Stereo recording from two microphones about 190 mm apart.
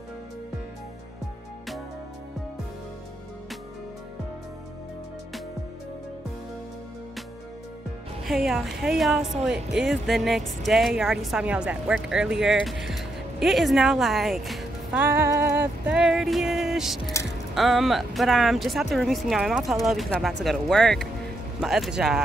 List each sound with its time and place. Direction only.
8.3 s a woman's voice: centre (ahead or behind)
17.0 s speech: 15° left (ahead or behind)
17.6 s a woman's voice: centre (ahead or behind)